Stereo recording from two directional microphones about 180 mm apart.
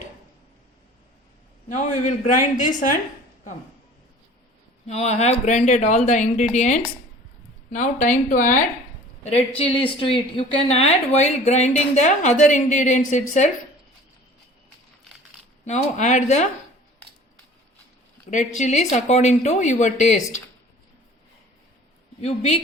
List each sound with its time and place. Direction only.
1.7 s speech: 40° left (ahead or behind)
4.9 s a woman's voice: 40° left (ahead or behind)
9.6 s a woman's voice: 30° left (ahead or behind)
15.6 s a woman's voice: 40° left (ahead or behind)
18.3 s a woman's voice: 45° left (ahead or behind)
22.2 s a woman's voice: 35° left (ahead or behind)